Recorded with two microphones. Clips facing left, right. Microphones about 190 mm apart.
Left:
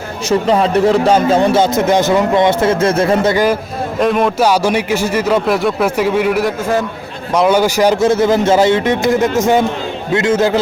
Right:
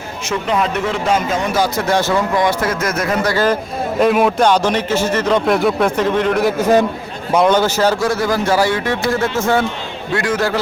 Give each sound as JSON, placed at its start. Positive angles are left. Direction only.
{"t": 0.3, "sound": "speech", "side_deg": 35}
{"t": 3.3, "sound": "a man's voice", "side_deg": 10}
{"t": 4.0, "sound": "speech", "side_deg": -5}
{"t": 4.4, "sound": "a man's voice", "side_deg": 10}
{"t": 6.6, "sound": "a man's voice", "side_deg": -20}
{"t": 7.3, "sound": "speech", "side_deg": 10}